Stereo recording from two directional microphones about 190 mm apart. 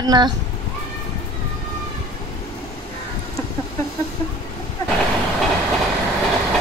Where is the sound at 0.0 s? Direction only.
20° right (ahead or behind).